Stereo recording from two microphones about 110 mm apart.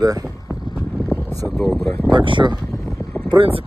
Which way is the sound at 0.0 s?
35° right (ahead or behind).